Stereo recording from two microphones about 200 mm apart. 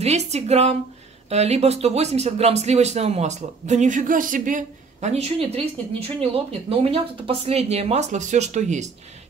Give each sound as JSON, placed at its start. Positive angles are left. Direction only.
{"t": 0.0, "sound": "speech", "side_deg": -30}